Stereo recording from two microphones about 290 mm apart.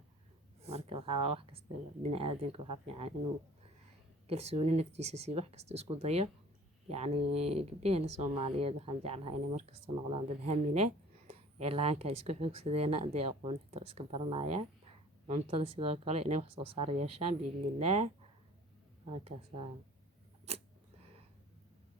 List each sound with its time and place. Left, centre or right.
0.6 s speech: right
4.3 s speech: right